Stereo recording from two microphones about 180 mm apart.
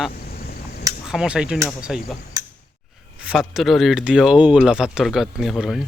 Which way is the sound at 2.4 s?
20° right (ahead or behind).